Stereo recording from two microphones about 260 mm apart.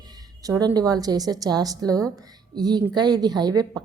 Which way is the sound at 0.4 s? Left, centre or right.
Centre.